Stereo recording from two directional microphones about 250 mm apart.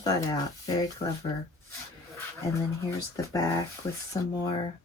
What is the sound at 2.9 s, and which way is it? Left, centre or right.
Speech, centre.